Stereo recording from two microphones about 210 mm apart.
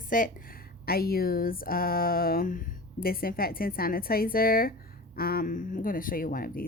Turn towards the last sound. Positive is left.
turn(degrees=40)  # may be behind; listen again after turning